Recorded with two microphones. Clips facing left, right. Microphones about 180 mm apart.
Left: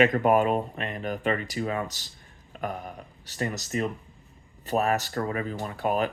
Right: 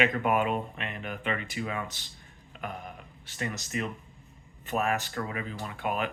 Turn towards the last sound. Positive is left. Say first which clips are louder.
# left 5 dB
turn(degrees=40)  # may be behind; listen again after turning